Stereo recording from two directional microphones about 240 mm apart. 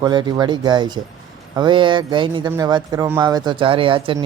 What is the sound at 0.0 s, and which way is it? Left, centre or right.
Speech, centre.